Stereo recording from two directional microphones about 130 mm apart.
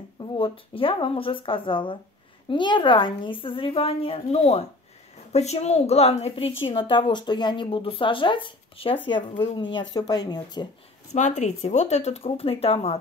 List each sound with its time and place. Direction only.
0.2 s a woman's voice: 40° left (ahead or behind)
11.1 s a woman's voice: 65° left (ahead or behind); by 13.0 s 50° left (ahead or behind)